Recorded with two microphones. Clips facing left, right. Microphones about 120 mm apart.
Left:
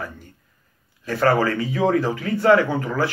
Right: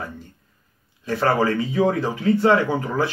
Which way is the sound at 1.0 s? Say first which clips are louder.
Left 1 dB; 25° right (ahead or behind).